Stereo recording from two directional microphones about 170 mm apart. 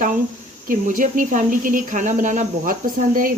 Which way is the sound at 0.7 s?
50° right (ahead or behind).